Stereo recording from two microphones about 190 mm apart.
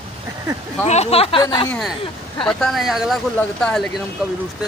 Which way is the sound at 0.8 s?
35° left (ahead or behind).